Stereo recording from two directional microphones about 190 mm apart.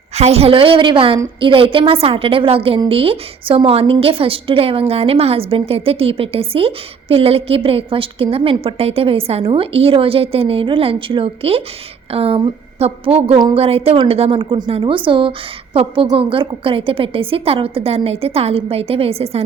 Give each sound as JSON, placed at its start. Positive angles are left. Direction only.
{"t": 0.1, "sound": "a woman's voice", "side_deg": -35}